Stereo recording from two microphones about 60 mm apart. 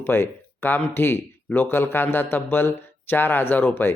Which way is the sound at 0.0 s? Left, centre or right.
Left.